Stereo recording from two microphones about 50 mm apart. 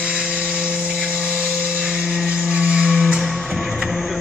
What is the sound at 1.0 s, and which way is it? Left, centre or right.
Tools, centre.